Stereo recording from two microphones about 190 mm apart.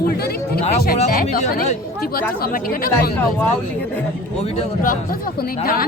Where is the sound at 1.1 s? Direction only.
50° left (ahead or behind).